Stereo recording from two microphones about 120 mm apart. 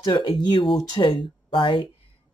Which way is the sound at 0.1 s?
45° left (ahead or behind).